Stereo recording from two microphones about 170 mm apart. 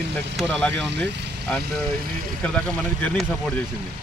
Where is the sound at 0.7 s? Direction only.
90° right.